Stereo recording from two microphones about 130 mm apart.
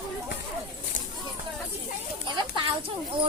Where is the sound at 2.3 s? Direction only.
35° right (ahead or behind).